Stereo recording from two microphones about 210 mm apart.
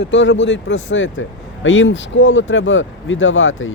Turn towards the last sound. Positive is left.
turn(degrees=65)  # may be behind; listen again after turning